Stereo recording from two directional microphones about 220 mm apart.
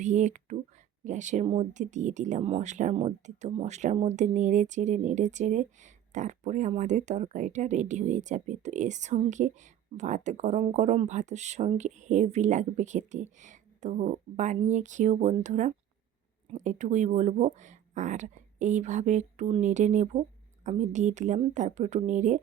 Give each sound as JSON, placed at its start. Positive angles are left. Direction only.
{"t": 0.0, "sound": "speech", "side_deg": -35}